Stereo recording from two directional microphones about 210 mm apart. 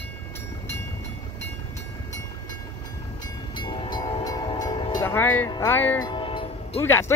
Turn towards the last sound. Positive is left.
turn(degrees=10)  # may be behind; listen again after turning